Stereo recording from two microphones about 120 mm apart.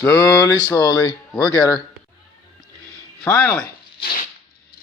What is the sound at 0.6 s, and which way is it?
Speech, 30° left (ahead or behind).